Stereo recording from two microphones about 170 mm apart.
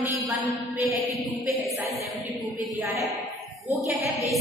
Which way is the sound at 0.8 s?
Centre (ahead or behind).